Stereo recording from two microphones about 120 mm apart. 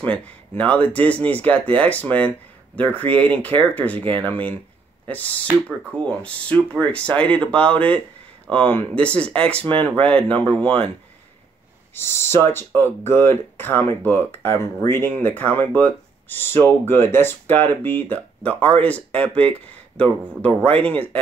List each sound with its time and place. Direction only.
0.0 s speech: 10° left (ahead or behind)
11.9 s speech: 20° left (ahead or behind)